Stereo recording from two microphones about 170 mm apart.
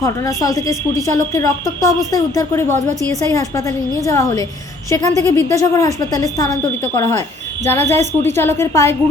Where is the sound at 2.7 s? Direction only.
45° right (ahead or behind).